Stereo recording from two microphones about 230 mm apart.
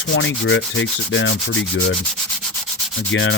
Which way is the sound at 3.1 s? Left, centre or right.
Left.